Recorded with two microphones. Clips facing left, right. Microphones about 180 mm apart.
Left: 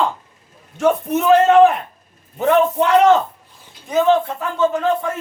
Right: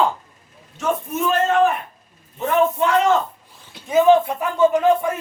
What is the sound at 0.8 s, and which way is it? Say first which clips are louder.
Speech: left 6 dB; 75° left (ahead or behind).